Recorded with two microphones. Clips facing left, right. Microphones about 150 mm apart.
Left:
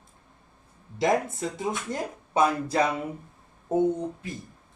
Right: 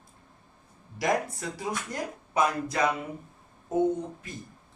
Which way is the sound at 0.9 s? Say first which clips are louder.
Left 3 dB; 25° left (ahead or behind).